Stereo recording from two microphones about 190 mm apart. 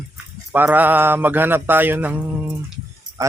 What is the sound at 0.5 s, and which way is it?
A man's voice, 10° right (ahead or behind).